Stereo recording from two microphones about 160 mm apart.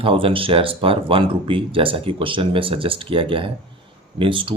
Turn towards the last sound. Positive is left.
turn(degrees=-30)  # may be behind; listen again after turning